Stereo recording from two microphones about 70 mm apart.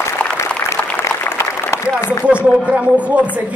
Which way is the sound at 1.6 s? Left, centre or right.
Left.